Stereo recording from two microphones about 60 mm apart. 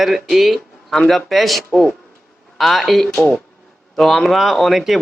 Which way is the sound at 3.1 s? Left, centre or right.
Centre.